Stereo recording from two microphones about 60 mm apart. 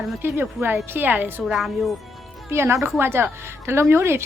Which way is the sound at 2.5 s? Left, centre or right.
Right.